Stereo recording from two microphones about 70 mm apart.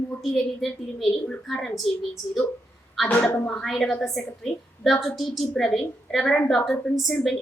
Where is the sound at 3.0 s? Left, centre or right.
Left.